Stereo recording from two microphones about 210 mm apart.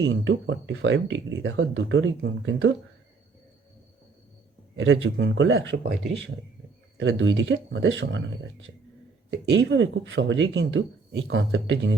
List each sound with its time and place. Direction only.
0.0 s speech: 60° right (ahead or behind)
4.8 s speech: 60° right (ahead or behind)